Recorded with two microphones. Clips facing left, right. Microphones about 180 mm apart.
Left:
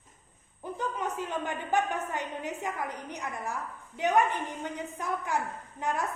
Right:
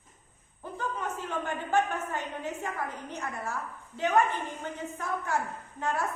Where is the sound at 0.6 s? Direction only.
15° left (ahead or behind).